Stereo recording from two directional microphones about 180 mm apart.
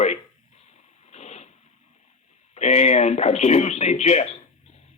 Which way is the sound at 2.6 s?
35° left (ahead or behind).